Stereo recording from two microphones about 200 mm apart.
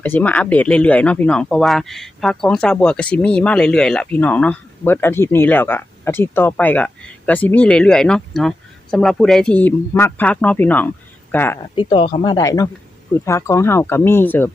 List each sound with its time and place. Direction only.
0.0 s speech: 10° left (ahead or behind)
11.7 s speech: 25° left (ahead or behind)